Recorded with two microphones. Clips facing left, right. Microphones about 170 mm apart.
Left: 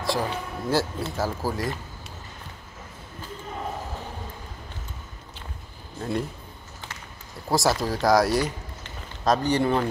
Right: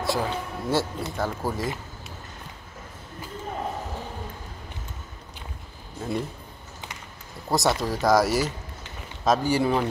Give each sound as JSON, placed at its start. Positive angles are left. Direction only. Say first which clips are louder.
{"t": 0.0, "sound": "speech", "louder": "even", "side_deg": 0}
{"t": 5.9, "sound": "speech", "louder": "left 1 dB", "side_deg": 0}
{"t": 7.4, "sound": "speech", "louder": "left 1 dB", "side_deg": 0}